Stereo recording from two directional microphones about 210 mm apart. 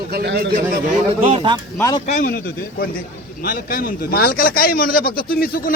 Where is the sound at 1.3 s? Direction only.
25° right (ahead or behind).